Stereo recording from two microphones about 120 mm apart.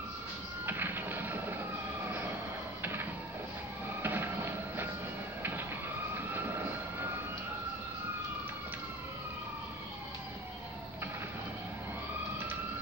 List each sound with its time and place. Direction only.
0.7 s printer: 15° right (ahead or behind)
2.0 s train: 15° right (ahead or behind)
2.8 s printer: 15° right (ahead or behind)
4.0 s a sound: 20° right (ahead or behind)
6.1 s train: 15° right (ahead or behind)